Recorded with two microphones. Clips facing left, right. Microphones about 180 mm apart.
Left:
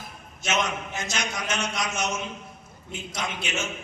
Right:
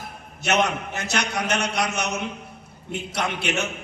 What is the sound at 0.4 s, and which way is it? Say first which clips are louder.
A man's voice: right 5 dB; 65° right (ahead or behind).